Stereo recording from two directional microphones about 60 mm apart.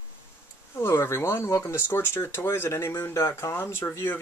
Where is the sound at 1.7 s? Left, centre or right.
Left.